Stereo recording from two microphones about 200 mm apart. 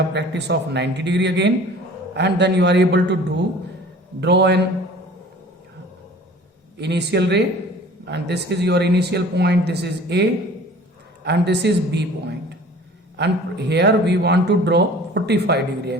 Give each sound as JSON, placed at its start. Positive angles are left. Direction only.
{"t": 0.1, "sound": "speech", "side_deg": -60}
{"t": 6.7, "sound": "speech", "side_deg": -60}
{"t": 13.1, "sound": "speech", "side_deg": -55}